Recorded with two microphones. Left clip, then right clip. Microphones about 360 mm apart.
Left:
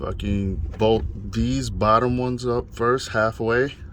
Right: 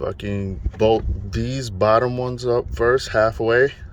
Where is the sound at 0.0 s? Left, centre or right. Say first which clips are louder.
Right 3 dB; right.